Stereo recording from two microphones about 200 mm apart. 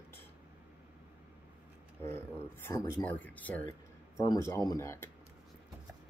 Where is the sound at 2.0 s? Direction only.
10° left (ahead or behind).